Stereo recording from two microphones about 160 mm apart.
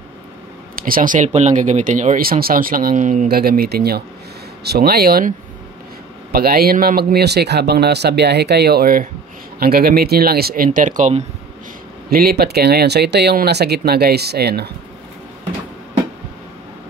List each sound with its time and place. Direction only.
0.7 s speech: 60° right (ahead or behind)
6.3 s speech: 70° right (ahead or behind); by 11.2 s 50° right (ahead or behind)
12.1 s speech: 70° right (ahead or behind); by 14.7 s 90° right